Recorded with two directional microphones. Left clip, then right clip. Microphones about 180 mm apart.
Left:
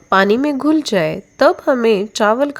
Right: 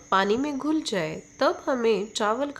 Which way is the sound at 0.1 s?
40° left (ahead or behind).